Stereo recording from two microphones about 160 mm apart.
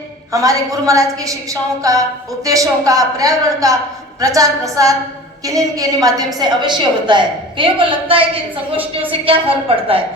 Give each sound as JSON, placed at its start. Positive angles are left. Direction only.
{"t": 0.3, "sound": "a woman's voice", "side_deg": -20}